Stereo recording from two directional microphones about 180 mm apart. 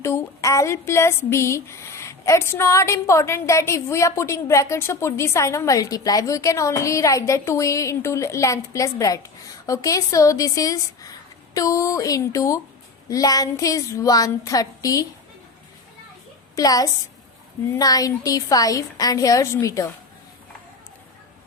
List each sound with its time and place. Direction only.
0.0 s a woman's voice: 15° left (ahead or behind)
16.6 s a woman's voice: 20° left (ahead or behind)